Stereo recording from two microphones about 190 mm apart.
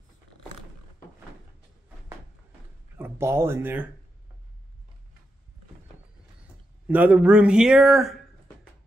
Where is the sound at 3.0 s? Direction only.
15° right (ahead or behind).